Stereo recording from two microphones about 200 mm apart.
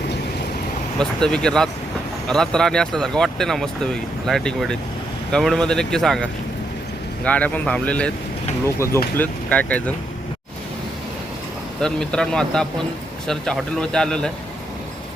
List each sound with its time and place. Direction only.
0.9 s speech: 5° left (ahead or behind)
7.3 s speech: 5° left (ahead or behind)
9.1 s speech: 10° left (ahead or behind)
11.8 s speech: 5° left (ahead or behind)